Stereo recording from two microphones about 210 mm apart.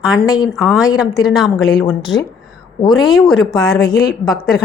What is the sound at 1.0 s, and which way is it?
A woman's voice, centre (ahead or behind).